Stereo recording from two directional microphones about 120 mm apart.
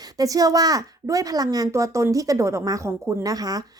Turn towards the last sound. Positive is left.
turn(degrees=-30)  # may be behind; listen again after turning